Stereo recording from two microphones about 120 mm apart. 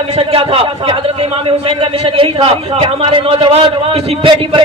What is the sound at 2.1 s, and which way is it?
A man's voice, 50° right (ahead or behind).